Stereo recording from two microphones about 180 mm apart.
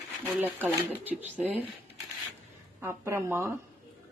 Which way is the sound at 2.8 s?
15° right (ahead or behind).